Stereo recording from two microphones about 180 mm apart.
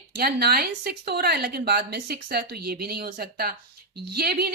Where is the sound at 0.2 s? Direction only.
60° right (ahead or behind).